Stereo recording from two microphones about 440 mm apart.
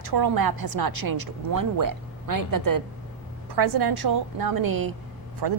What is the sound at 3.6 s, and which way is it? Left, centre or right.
A woman's voice, right.